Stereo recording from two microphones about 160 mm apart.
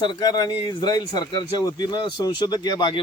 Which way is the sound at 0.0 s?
25° left (ahead or behind).